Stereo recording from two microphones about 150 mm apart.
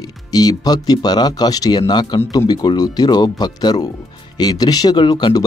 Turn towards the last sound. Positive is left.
turn(degrees=30)  # may be behind; listen again after turning